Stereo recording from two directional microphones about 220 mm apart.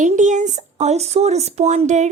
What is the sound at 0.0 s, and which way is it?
Speech, 35° right (ahead or behind).